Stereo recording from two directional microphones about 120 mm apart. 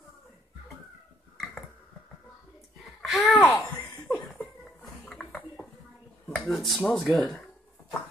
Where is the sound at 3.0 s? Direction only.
Centre (ahead or behind).